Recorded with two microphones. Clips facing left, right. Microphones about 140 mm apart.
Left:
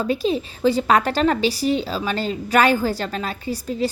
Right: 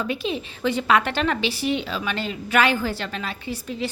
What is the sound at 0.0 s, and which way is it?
A woman's voice, 40° left (ahead or behind).